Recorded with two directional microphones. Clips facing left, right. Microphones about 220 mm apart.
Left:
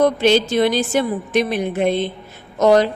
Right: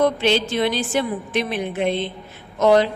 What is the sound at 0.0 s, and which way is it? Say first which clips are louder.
A woman's voice: left 4 dB; 45° left (ahead or behind).